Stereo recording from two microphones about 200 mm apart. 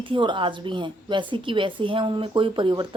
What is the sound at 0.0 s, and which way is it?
A woman's voice, 25° right (ahead or behind).